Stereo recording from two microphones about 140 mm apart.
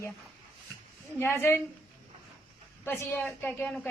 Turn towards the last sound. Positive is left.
turn(degrees=10)  # may be behind; listen again after turning